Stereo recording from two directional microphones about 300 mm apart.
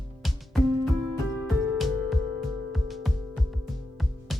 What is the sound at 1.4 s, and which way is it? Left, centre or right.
Music, centre.